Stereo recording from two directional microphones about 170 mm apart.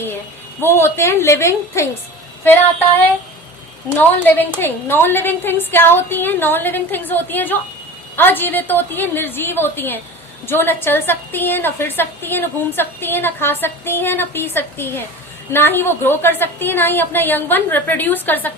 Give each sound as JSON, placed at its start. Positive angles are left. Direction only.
{"t": 0.6, "sound": "a woman's voice", "side_deg": 15}
{"t": 3.8, "sound": "a woman's voice", "side_deg": 10}